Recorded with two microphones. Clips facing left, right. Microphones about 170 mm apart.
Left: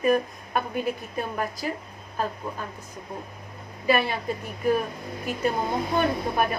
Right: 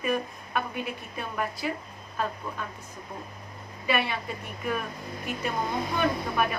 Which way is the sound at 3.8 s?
40° left (ahead or behind).